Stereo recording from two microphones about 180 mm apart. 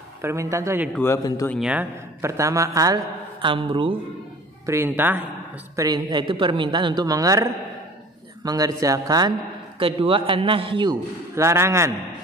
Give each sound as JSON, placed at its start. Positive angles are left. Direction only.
{"t": 0.2, "sound": "a man's voice", "side_deg": -15}
{"t": 0.9, "sound": "a man's voice", "side_deg": 15}
{"t": 1.5, "sound": "a man's voice", "side_deg": -5}
{"t": 4.6, "sound": "a man's voice", "side_deg": -15}
{"t": 5.8, "sound": "a man's voice", "side_deg": -20}
{"t": 8.5, "sound": "a man's voice", "side_deg": -20}